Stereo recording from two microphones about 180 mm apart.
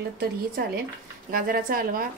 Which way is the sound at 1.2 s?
55° right (ahead or behind).